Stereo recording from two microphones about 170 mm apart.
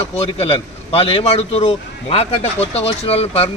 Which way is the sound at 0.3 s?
35° left (ahead or behind).